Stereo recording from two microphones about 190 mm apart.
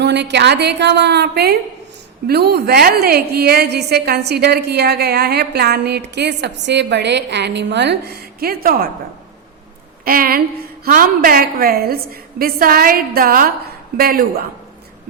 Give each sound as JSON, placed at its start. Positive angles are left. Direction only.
{"t": 0.0, "sound": "a woman's voice", "side_deg": -65}
{"t": 10.0, "sound": "a woman's voice", "side_deg": -50}